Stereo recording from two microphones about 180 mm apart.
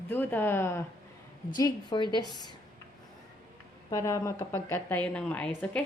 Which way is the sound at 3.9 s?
15° left (ahead or behind).